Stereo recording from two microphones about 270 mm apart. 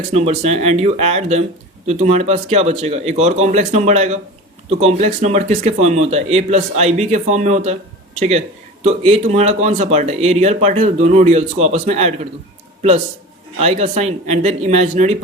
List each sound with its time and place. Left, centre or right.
0.1 s a man's voice: right
13.6 s a man's voice: right